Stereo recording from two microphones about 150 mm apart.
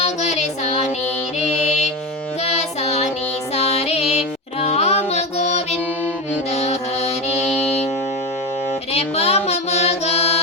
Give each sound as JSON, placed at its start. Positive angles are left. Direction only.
{"t": 0.0, "sound": "music", "side_deg": 50}
{"t": 8.9, "sound": "music", "side_deg": 45}